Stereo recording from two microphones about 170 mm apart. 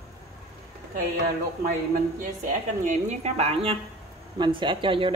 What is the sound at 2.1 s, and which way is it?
A woman's voice, 50° right (ahead or behind).